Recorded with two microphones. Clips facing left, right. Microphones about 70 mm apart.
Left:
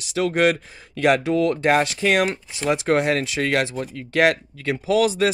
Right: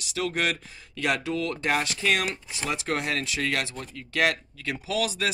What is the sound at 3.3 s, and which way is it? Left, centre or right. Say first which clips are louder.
Speech: left 7 dB; left.